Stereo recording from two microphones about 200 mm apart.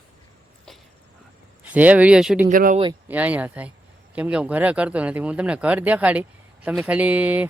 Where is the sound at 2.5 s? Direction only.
40° right (ahead or behind).